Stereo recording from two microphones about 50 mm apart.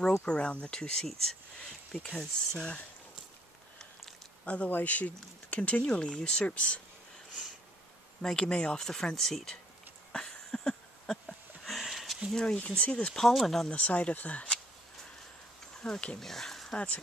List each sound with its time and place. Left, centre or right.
0.2 s speech: left
4.5 s speech: left
5.9 s speech: centre
8.2 s speech: centre
10.1 s a sound: centre
11.6 s a sound: centre
12.5 s speech: left
13.3 s speech: centre
13.7 s speech: left
15.8 s speech: left
16.2 s speech: centre
16.7 s speech: left